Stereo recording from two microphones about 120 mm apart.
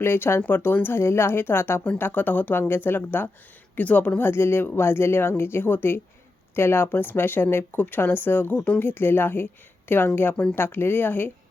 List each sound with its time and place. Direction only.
0.0 s speech: 20° left (ahead or behind)